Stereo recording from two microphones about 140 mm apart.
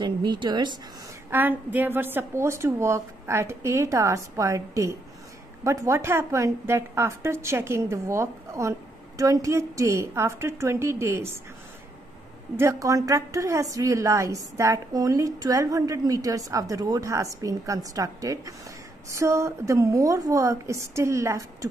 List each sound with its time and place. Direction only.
0.0 s a woman's voice: 35° right (ahead or behind)
1.3 s a woman's voice: 15° right (ahead or behind)
12.5 s a woman's voice: 20° right (ahead or behind)